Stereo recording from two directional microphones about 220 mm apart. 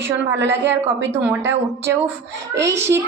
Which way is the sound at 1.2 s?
10° right (ahead or behind).